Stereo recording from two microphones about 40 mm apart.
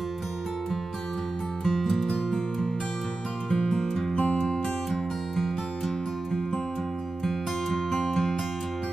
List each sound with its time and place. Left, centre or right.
1.6 s music: centre
2.0 s music: centre
4.1 s music: left
4.5 s music: centre
7.2 s music: centre